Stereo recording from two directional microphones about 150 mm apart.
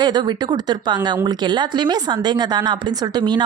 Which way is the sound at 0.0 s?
30° right (ahead or behind).